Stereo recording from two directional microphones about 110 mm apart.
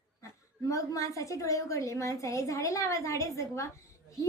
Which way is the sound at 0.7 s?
30° left (ahead or behind).